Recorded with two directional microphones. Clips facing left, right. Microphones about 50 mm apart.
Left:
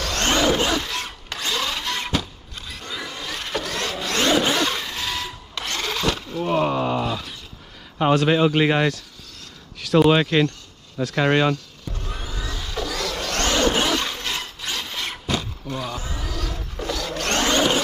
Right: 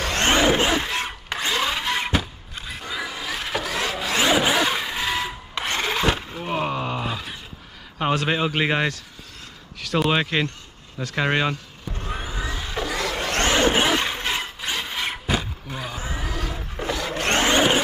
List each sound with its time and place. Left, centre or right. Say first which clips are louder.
0.0 s wood: right 1 dB; right
6.4 s a sound: left 5 dB; centre
7.1 s a sound: left 2 dB; centre
8.0 s speech: left 5 dB; centre
11.2 s speech: left 4 dB; centre
11.9 s vehicle: right 3 dB; right